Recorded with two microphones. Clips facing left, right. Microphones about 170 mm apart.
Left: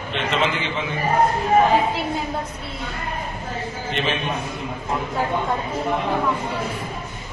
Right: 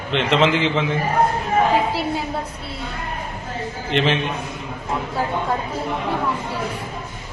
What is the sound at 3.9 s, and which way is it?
Speech, 90° right.